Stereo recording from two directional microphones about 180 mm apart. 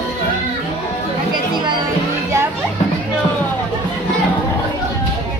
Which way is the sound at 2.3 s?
15° right (ahead or behind).